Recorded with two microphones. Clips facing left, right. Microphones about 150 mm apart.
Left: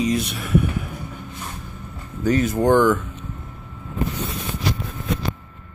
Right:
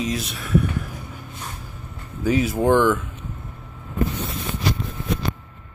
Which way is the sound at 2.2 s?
5° right (ahead or behind).